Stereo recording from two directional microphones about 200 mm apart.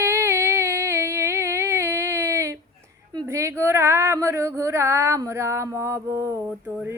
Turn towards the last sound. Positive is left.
turn(degrees=-5)  # may be behind; listen again after turning